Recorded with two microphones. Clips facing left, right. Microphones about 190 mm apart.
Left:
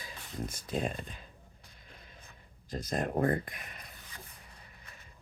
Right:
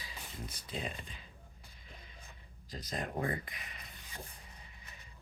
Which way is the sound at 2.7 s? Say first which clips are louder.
Left 7 dB; 50° left (ahead or behind).